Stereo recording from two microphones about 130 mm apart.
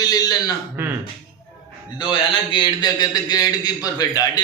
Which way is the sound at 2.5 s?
35° left (ahead or behind).